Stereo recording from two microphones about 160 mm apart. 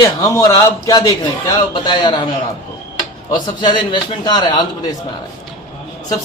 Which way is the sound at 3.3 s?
25° left (ahead or behind).